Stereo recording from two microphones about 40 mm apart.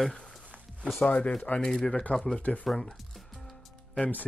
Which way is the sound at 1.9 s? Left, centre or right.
Left.